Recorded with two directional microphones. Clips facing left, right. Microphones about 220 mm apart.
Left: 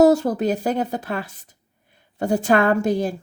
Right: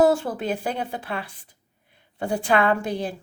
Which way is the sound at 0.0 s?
40° left (ahead or behind).